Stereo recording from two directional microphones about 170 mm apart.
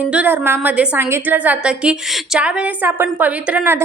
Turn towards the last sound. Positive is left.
turn(degrees=-10)  # may be behind; listen again after turning